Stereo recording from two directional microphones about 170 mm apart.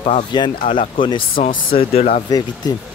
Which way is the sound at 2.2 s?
25° left (ahead or behind).